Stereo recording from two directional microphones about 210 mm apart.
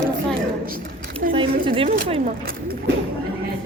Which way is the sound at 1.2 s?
40° right (ahead or behind).